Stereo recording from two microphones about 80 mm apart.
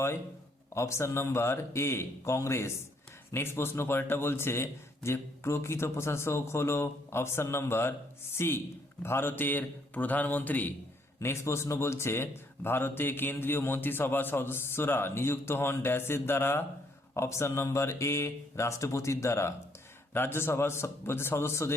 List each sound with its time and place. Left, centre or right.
0.7 s speech: left
11.2 s speech: left